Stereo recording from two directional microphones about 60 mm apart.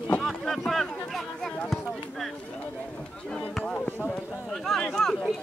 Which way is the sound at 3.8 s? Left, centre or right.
Left.